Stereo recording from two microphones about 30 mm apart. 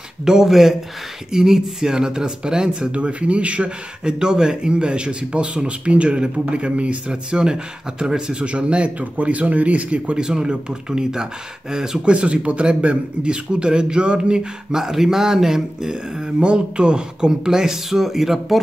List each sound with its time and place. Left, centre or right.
0.2 s speech: centre
2.9 s speech: right
4.0 s a man's voice: right
7.1 s speech: right
8.5 s a man's voice: right
9.0 s speech: right
9.9 s speech: right
12.0 s a man's voice: right
14.8 s speech: centre
16.3 s a man's voice: right
17.5 s speech: centre